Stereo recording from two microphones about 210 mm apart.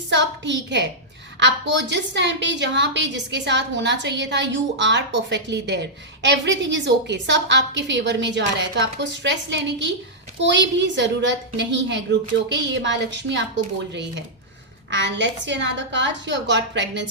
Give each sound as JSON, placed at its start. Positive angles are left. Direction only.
{"t": 0.1, "sound": "a woman's voice", "side_deg": -60}